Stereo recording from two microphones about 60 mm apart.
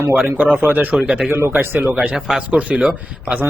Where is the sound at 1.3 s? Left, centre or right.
Right.